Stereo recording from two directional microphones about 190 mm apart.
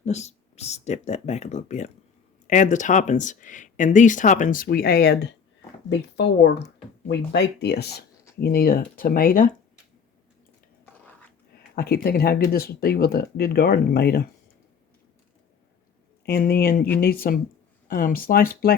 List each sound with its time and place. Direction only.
0.0 s speech: 35° left (ahead or behind)
11.7 s speech: 55° left (ahead or behind)
16.2 s speech: 55° left (ahead or behind)